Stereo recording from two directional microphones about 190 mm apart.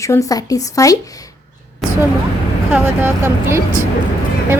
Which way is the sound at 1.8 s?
Centre (ahead or behind).